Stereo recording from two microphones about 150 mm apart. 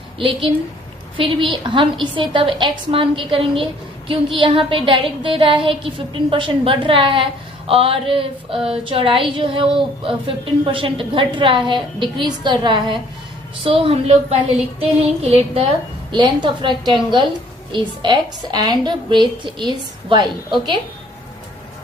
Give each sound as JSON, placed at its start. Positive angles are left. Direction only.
{"t": 1.1, "sound": "a woman's voice", "side_deg": -35}